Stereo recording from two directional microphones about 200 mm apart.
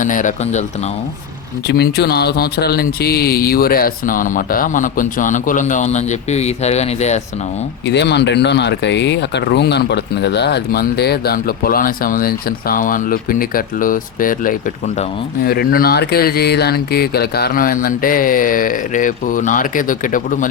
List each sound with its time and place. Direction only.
0.0 s speech: 40° left (ahead or behind)
1.6 s speech: 55° left (ahead or behind); by 7.2 s 35° left (ahead or behind)
7.9 s speech: 60° left (ahead or behind); by 20.5 s 40° left (ahead or behind)